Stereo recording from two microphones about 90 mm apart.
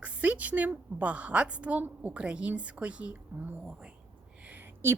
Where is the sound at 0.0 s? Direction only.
15° right (ahead or behind).